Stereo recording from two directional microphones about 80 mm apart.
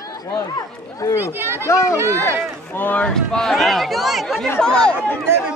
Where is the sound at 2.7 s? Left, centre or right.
Left.